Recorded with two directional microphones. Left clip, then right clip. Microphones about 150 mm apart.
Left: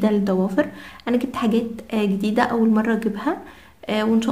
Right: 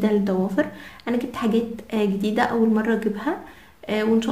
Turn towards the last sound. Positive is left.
turn(degrees=35)  # may be behind; listen again after turning